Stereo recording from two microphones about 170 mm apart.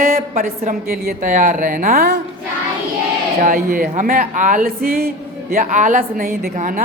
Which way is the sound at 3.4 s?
60° right (ahead or behind).